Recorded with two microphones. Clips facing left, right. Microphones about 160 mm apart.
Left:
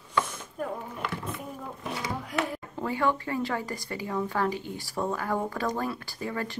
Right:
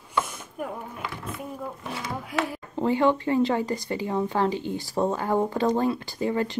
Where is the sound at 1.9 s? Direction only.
Centre (ahead or behind).